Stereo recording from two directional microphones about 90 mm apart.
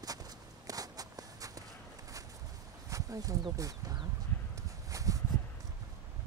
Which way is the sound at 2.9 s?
40° right (ahead or behind).